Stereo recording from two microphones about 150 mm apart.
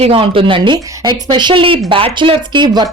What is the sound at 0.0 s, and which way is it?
Speech, 35° right (ahead or behind).